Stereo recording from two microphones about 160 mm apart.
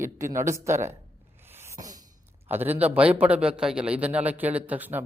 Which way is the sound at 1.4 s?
15° right (ahead or behind).